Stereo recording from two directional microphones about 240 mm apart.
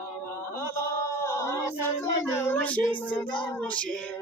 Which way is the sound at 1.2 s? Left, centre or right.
Centre.